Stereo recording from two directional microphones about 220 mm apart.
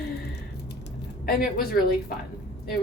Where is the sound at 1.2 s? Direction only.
40° left (ahead or behind).